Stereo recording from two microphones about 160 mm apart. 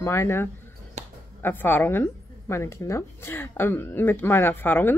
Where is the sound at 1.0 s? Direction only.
45° right (ahead or behind).